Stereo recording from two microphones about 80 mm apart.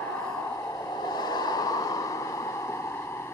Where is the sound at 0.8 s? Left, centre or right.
Left.